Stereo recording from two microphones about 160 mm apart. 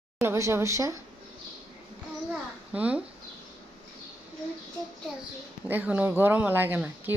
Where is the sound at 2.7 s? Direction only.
10° right (ahead or behind).